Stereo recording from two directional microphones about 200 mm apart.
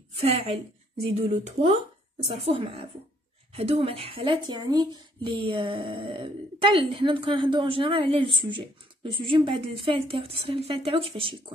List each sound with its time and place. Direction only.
0.1 s a woman's voice: 30° right (ahead or behind)